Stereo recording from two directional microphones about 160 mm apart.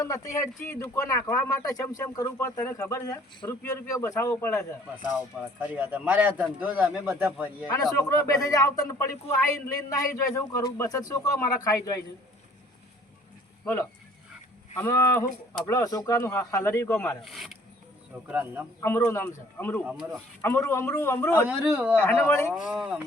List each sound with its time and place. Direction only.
0.0 s speech: 20° left (ahead or behind)
5.5 s a man's voice: 10° right (ahead or behind)
7.9 s speech: 20° left (ahead or behind)
14.8 s speech: 15° left (ahead or behind)
17.2 s a man's voice: centre (ahead or behind)
18.8 s speech: 15° left (ahead or behind)
19.8 s a man's voice: 5° right (ahead or behind)
20.4 s speech: 15° left (ahead or behind)
21.4 s a man's voice: 10° right (ahead or behind)
21.9 s speech: 15° left (ahead or behind)
22.7 s a man's voice: 10° right (ahead or behind)